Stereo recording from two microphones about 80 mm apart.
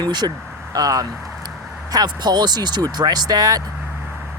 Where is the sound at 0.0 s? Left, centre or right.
Right.